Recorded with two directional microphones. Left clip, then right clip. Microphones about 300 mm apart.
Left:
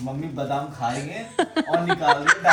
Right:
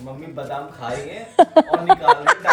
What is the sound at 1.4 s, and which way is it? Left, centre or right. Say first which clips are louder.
Speech: right 9 dB; centre.